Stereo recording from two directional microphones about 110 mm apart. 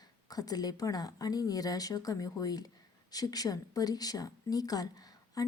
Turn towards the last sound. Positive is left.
turn(degrees=35)  # may be behind; listen again after turning